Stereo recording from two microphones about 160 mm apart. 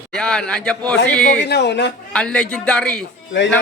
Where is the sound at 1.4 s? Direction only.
90° left.